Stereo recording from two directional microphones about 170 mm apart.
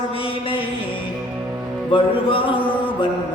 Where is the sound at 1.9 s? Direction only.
30° left (ahead or behind).